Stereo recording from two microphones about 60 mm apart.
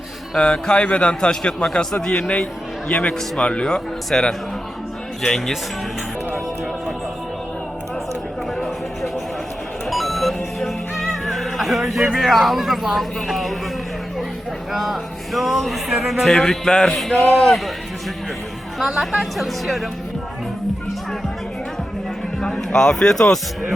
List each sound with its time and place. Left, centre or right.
0.3 s a man's voice: centre
8.5 s a sound: centre
9.9 s music: centre
14.7 s speech: centre
18.8 s speech: centre
22.4 s speech: centre